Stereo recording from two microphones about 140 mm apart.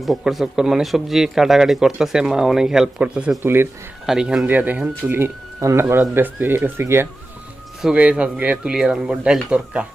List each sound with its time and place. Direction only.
0.0 s speech: centre (ahead or behind); by 3.7 s 15° right (ahead or behind)
4.0 s speech: 5° right (ahead or behind)
7.8 s speech: 5° right (ahead or behind)